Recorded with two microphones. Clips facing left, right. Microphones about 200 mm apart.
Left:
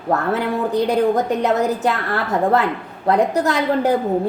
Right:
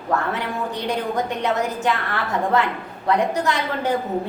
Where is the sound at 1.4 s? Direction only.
40° left (ahead or behind).